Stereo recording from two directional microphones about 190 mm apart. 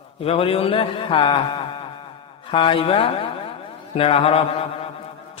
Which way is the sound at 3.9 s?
30° left (ahead or behind).